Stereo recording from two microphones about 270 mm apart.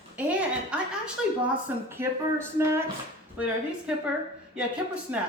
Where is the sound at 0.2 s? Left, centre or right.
Centre.